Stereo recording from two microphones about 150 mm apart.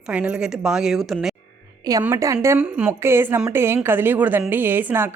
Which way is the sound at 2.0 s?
20° right (ahead or behind).